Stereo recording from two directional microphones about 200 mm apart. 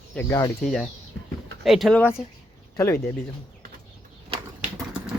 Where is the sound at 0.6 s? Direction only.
Centre (ahead or behind).